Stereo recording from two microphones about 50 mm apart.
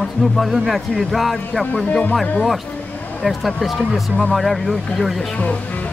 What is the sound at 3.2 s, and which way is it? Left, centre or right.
Speech, centre.